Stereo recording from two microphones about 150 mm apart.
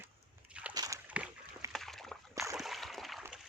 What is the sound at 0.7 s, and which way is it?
Slosh, 20° right (ahead or behind).